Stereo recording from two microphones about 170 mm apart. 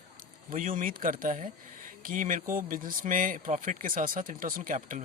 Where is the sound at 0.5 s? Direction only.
55° right (ahead or behind).